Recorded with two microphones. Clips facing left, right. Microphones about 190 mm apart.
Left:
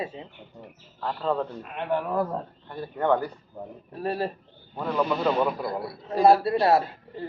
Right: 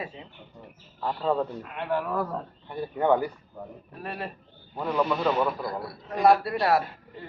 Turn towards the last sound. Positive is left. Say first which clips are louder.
# left 2 dB
turn(degrees=25)  # may be behind; listen again after turning